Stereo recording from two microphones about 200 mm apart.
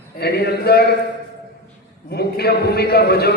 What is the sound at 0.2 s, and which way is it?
Speech, 50° left (ahead or behind).